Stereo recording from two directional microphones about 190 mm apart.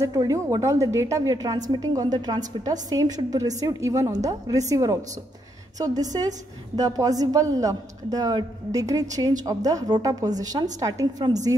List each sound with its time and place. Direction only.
0.0 s a woman's voice: 20° right (ahead or behind)